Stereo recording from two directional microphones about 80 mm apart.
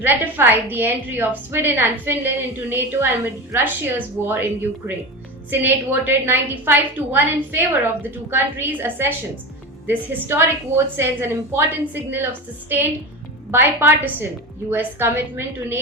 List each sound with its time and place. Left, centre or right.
0.0 s a woman's voice: right
5.5 s a woman's voice: right